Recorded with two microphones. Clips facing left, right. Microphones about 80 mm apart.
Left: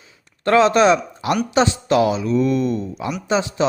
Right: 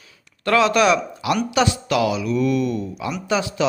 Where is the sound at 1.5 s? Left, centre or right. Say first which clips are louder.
Left 5 dB; left.